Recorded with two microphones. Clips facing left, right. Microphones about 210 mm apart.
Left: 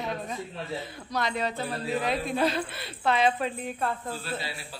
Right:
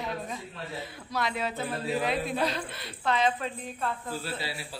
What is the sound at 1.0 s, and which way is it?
Speech, 5° right (ahead or behind).